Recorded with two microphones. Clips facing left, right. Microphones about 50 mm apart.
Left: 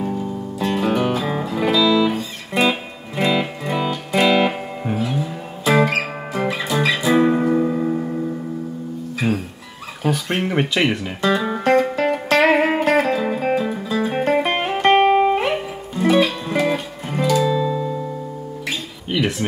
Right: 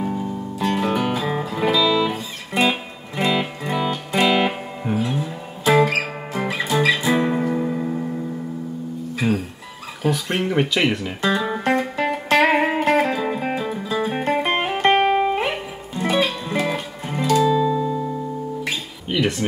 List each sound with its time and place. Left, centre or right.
0.0 s music: centre
2.0 s music: centre
9.2 s music: centre
10.0 s a sound: centre
11.2 s music: centre
14.7 s music: centre
15.0 s music: centre
15.3 s music: centre
19.0 s a sound: centre